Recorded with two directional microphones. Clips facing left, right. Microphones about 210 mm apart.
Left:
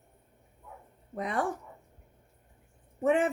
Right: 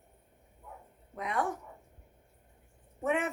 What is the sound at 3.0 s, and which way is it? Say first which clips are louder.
Speech: left 5 dB; 30° left (ahead or behind).